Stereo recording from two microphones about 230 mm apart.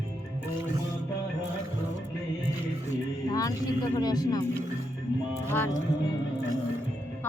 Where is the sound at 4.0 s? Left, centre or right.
Centre.